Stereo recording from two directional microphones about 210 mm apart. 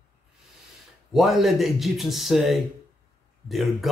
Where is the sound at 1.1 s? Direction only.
Centre (ahead or behind).